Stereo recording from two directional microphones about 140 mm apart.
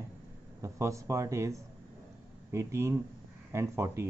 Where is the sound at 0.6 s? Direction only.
20° right (ahead or behind).